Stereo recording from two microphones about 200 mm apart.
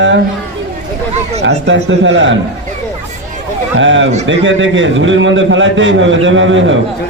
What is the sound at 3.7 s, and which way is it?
A man's voice, 70° right (ahead or behind).